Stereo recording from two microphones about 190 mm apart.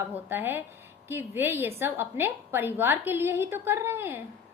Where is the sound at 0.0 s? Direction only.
10° right (ahead or behind).